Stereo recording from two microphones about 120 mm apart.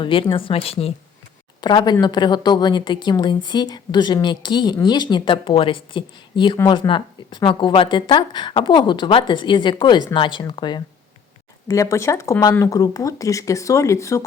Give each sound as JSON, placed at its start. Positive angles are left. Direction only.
{"t": 0.0, "sound": "speech", "side_deg": 45}
{"t": 1.6, "sound": "a woman's voice", "side_deg": 35}
{"t": 11.7, "sound": "speech", "side_deg": 25}